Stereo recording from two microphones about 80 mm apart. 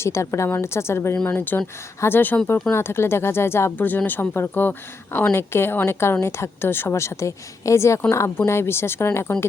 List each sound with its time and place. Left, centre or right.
0.0 s a woman's voice: left
1.1 s a woman's voice: centre